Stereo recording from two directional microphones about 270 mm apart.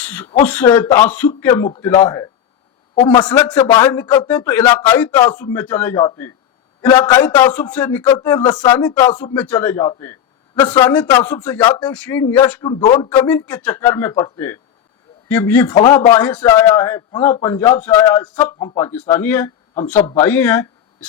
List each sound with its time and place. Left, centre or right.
0.0 s a man's voice: centre
3.2 s a man's voice: centre